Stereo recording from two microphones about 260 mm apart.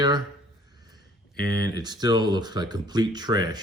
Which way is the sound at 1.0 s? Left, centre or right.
Left.